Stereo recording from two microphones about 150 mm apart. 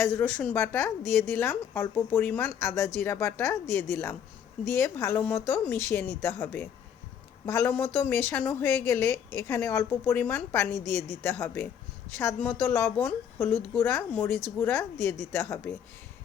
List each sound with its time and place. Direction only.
0.0 s a woman's voice: 15° left (ahead or behind)